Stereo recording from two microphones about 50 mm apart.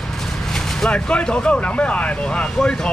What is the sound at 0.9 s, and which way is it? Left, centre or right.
Speech, left.